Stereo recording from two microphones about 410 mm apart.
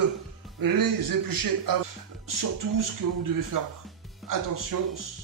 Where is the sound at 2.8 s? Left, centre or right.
Right.